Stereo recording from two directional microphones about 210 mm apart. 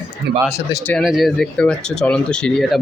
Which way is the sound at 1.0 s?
Centre (ahead or behind).